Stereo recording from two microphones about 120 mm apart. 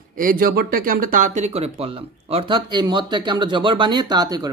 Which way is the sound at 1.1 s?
85° right.